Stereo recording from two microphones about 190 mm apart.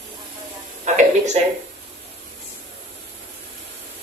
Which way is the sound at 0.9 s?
40° right (ahead or behind).